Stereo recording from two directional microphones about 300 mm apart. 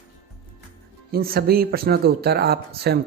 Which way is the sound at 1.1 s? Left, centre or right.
Right.